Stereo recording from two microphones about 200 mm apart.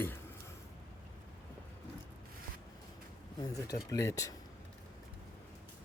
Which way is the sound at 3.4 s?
20° left (ahead or behind).